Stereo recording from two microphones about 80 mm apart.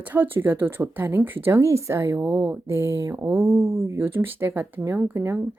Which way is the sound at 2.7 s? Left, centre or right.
Right.